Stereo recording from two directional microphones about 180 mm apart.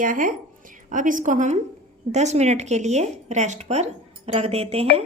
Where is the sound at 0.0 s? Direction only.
45° right (ahead or behind).